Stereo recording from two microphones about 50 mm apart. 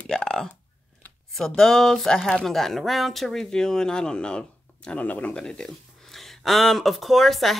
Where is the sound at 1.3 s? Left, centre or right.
Centre.